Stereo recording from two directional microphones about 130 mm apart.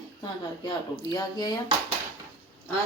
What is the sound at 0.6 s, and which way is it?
Speech, 30° left (ahead or behind).